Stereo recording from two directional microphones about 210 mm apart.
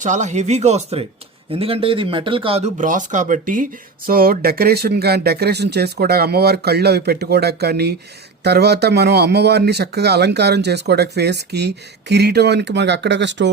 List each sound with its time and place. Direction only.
0.0 s speech: 35° right (ahead or behind); by 13.5 s 55° right (ahead or behind)